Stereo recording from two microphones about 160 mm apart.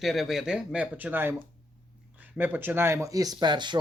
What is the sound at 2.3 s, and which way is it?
Speech, 10° right (ahead or behind).